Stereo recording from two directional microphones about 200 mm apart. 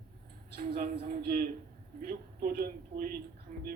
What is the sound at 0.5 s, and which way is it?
A woman's voice, 45° right (ahead or behind).